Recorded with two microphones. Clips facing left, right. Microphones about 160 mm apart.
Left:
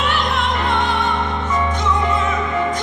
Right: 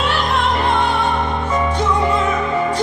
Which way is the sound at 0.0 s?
30° right (ahead or behind).